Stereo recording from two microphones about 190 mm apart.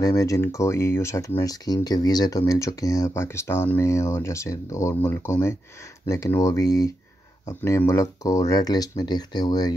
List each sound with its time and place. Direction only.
0.0 s speech: 20° left (ahead or behind)